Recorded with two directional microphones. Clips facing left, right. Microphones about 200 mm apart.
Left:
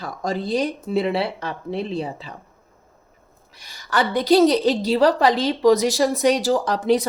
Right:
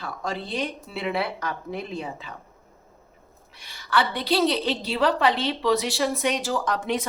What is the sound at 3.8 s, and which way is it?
A woman's voice, 40° left (ahead or behind).